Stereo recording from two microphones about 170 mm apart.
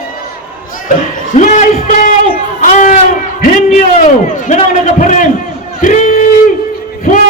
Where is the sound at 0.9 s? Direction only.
50° left (ahead or behind).